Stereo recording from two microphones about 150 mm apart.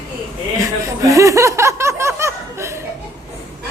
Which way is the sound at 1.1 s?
20° right (ahead or behind).